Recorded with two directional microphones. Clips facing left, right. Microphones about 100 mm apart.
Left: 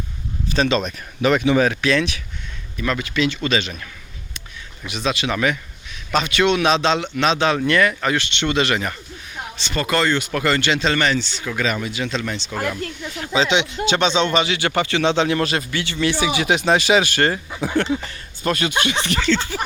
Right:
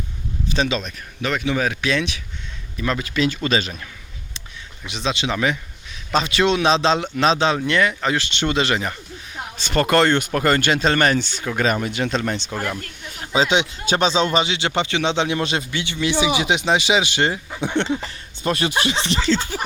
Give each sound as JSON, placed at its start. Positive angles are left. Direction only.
{"t": 0.4, "sound": "a sound", "side_deg": -15}
{"t": 0.9, "sound": "speech", "side_deg": 10}
{"t": 1.8, "sound": "speech", "side_deg": -15}
{"t": 2.7, "sound": "speech", "side_deg": -30}
{"t": 4.9, "sound": "speech", "side_deg": -30}
{"t": 9.6, "sound": "speech", "side_deg": -50}
{"t": 10.3, "sound": "speech", "side_deg": -45}
{"t": 14.3, "sound": "speech", "side_deg": -25}